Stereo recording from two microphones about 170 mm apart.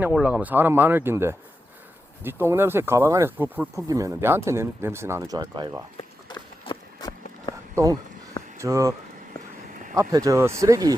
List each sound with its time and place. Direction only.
0.0 s speech: 5° right (ahead or behind); by 5.7 s 25° right (ahead or behind)
6.0 s run: 25° left (ahead or behind)
7.8 s speech: 15° right (ahead or behind)